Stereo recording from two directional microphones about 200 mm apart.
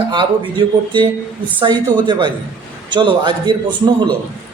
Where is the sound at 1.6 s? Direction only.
25° right (ahead or behind).